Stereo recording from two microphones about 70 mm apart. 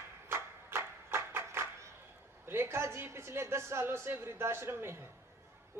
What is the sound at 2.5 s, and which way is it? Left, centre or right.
A woman's voice, right.